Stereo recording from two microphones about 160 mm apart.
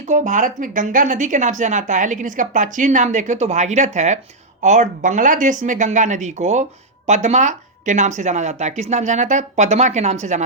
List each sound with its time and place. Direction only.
0.0 s a woman's voice: 50° right (ahead or behind)